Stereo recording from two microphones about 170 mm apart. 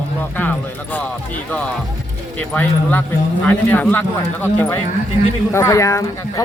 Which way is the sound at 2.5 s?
10° left (ahead or behind).